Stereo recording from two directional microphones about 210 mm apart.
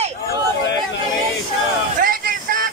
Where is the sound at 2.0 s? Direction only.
40° right (ahead or behind).